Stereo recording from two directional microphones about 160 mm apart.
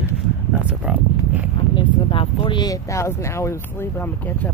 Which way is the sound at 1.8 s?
30° left (ahead or behind).